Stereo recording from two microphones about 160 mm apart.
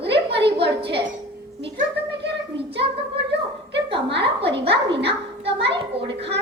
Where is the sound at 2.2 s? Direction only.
90° right.